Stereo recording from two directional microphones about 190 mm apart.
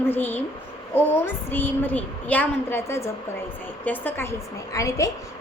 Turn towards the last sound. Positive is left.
turn(degrees=15)  # may be behind; listen again after turning